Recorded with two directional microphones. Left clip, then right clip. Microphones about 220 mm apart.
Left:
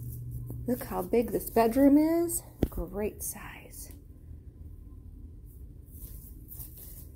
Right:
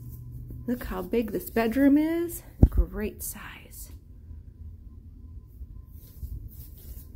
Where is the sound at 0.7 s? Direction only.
10° right (ahead or behind).